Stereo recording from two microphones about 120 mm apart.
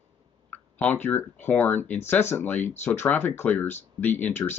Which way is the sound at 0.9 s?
15° left (ahead or behind).